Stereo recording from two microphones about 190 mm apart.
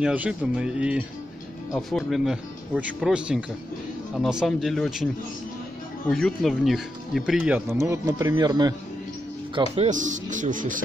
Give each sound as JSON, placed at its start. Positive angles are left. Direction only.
{"t": 0.0, "sound": "speech", "side_deg": -5}
{"t": 9.8, "sound": "speech", "side_deg": -40}